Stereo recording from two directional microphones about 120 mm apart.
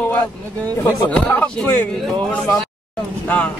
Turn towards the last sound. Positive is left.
turn(degrees=15)  # may be behind; listen again after turning